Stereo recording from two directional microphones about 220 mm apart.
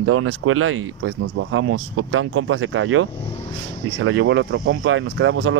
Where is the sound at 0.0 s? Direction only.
75° right (ahead or behind).